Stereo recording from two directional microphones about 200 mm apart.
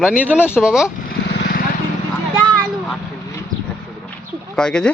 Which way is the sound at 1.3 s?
50° left (ahead or behind).